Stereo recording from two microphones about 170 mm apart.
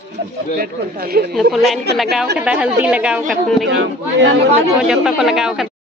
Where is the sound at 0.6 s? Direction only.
60° right (ahead or behind).